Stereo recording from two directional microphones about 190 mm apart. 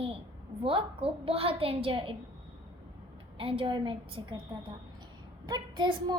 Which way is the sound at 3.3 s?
30° right (ahead or behind).